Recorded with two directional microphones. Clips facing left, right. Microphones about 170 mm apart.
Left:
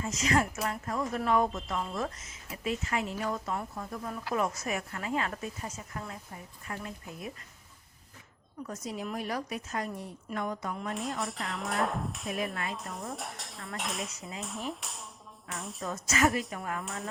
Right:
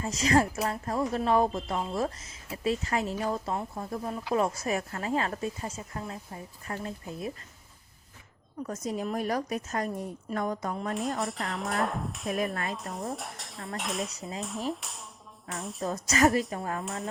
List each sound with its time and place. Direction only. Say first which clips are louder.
0.0 s speech: right 4 dB; 35° right (ahead or behind)
8.6 s a woman's voice: right 5 dB; 45° right (ahead or behind)
11.2 s speech: right 3 dB; centre (ahead or behind)
14.2 s speech: right 4 dB; 35° right (ahead or behind)
14.4 s speech: right 4 dB; centre (ahead or behind)
15.8 s speech: right 4 dB; 40° right (ahead or behind)
16.8 s speech: right 3 dB; centre (ahead or behind)